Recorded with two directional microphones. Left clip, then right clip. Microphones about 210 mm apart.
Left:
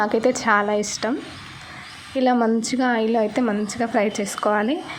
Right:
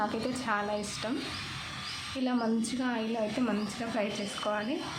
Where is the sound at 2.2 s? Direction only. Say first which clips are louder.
Left 13 dB; 30° left (ahead or behind).